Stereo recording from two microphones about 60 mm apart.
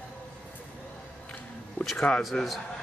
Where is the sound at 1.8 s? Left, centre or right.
Left.